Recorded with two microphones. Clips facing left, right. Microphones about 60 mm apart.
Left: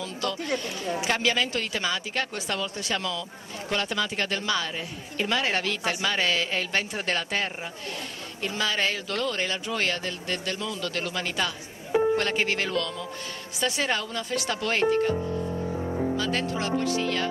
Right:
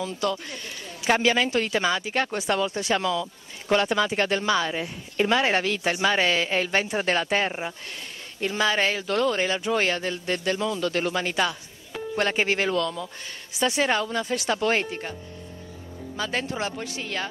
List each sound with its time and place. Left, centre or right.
0.0 s speech: centre
15.7 s music: left
16.2 s speech: centre